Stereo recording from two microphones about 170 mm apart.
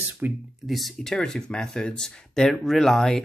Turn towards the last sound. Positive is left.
turn(degrees=5)  # may be behind; listen again after turning